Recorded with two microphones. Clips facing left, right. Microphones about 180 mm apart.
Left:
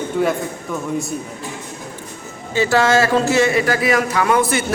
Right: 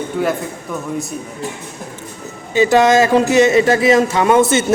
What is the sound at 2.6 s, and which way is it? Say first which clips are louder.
Speech: right 4 dB; 15° right (ahead or behind).